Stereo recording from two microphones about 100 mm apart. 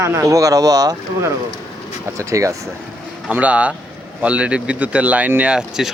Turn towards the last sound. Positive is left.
turn(degrees=-5)  # may be behind; listen again after turning